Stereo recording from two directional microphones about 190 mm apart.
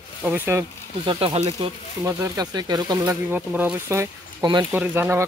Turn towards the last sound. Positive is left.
turn(degrees=-10)  # may be behind; listen again after turning